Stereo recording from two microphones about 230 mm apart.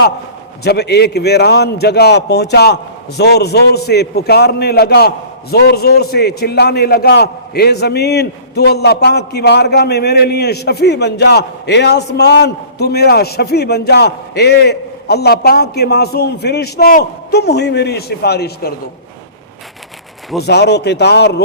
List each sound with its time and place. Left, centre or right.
0.6 s a man's voice: left
20.4 s a man's voice: left